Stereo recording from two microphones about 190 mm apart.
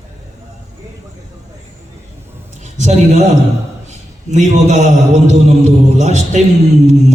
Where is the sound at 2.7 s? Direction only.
35° right (ahead or behind).